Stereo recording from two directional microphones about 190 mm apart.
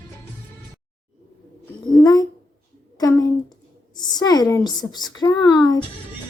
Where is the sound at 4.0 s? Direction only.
20° left (ahead or behind).